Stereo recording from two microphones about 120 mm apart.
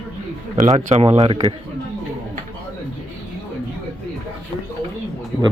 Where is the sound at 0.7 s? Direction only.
65° right (ahead or behind).